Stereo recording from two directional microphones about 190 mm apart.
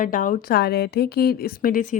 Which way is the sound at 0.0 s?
45° left (ahead or behind).